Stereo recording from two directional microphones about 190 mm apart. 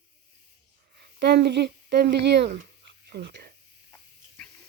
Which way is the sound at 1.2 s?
60° right (ahead or behind).